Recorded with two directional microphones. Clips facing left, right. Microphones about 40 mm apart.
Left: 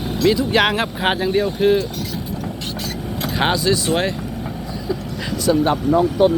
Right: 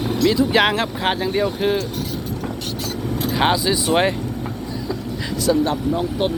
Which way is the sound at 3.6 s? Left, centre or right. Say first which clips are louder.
Right 1 dB; centre.